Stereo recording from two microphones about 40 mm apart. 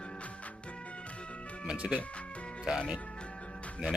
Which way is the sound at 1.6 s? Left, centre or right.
Right.